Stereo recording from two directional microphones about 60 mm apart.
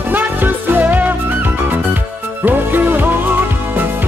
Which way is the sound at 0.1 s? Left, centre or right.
Right.